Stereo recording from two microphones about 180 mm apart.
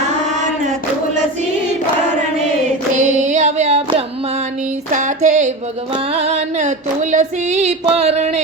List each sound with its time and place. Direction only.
2.9 s music: 45° right (ahead or behind)
4.9 s a sound: 45° right (ahead or behind)
5.9 s music: 30° right (ahead or behind)